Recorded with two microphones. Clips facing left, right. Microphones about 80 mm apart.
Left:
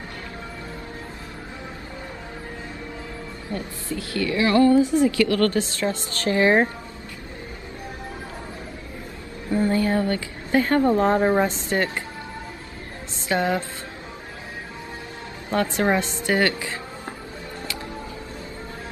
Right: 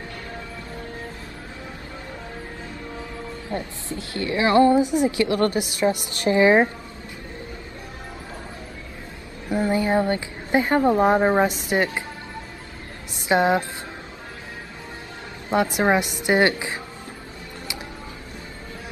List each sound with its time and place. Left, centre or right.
3.5 s a woman's voice: right
9.5 s a woman's voice: centre
13.3 s a woman's voice: centre
15.5 s a woman's voice: centre